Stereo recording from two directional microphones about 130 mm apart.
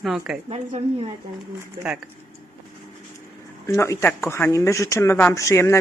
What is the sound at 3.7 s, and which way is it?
Speech, 25° left (ahead or behind).